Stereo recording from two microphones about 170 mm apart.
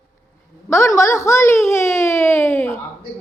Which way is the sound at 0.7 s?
15° left (ahead or behind).